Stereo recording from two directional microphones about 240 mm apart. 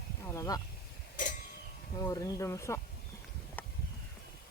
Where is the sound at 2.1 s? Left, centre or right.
Centre.